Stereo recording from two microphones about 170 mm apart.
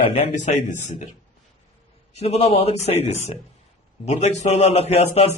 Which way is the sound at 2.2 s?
35° left (ahead or behind).